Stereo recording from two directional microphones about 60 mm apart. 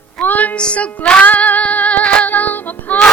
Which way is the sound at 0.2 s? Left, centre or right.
Left.